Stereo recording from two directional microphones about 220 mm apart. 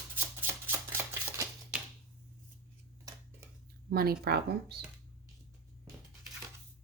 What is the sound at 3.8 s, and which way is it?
Speech, 45° right (ahead or behind).